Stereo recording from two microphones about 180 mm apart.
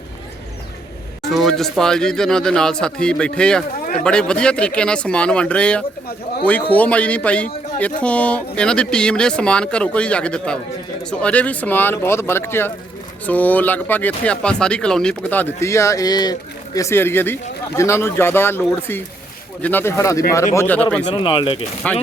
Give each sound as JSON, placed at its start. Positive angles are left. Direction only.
{"t": 1.2, "sound": "speech", "side_deg": 0}
{"t": 21.1, "sound": "speech", "side_deg": 25}
{"t": 21.8, "sound": "speech", "side_deg": 10}